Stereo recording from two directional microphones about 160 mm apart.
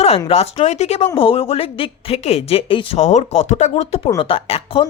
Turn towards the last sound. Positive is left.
turn(degrees=35)  # may be behind; listen again after turning